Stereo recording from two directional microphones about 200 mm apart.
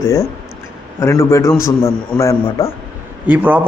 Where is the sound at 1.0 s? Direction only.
15° left (ahead or behind).